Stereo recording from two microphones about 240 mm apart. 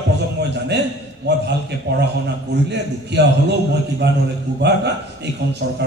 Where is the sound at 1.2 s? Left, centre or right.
Right.